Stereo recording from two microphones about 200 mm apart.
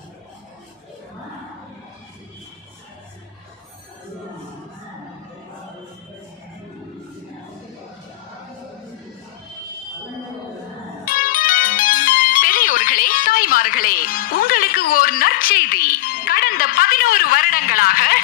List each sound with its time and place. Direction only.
11.1 s music: 45° left (ahead or behind)